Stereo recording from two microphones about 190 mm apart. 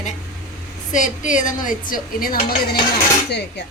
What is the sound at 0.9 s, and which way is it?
Speech, 40° left (ahead or behind).